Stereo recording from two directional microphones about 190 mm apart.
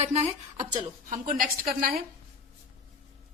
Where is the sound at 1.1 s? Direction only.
45° right (ahead or behind).